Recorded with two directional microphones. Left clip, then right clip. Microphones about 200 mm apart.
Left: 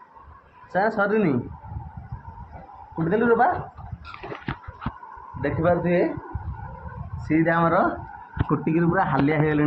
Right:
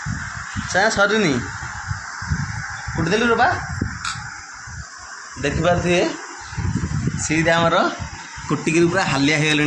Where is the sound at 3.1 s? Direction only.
45° right (ahead or behind).